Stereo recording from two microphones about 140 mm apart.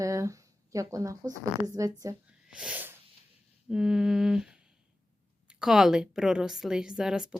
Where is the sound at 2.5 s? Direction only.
10° right (ahead or behind).